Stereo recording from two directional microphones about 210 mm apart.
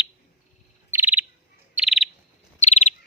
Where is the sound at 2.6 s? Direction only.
30° left (ahead or behind).